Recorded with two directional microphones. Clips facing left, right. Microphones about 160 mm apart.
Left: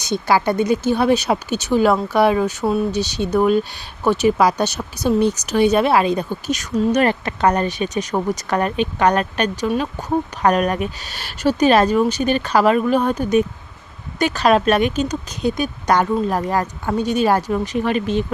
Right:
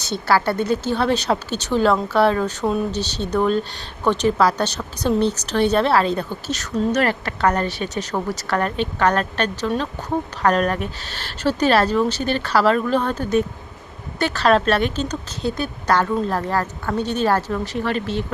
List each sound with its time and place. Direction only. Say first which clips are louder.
0.0 s speech: left 2 dB; 15° left (ahead or behind)